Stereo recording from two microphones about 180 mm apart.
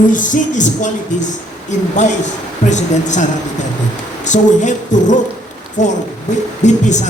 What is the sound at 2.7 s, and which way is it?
Speech, 40° left (ahead or behind).